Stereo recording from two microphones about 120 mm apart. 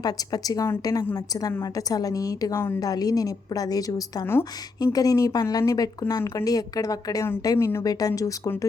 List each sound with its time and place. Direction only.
0.0 s speech: 35° left (ahead or behind)